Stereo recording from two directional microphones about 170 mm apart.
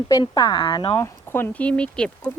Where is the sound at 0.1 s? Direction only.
20° left (ahead or behind).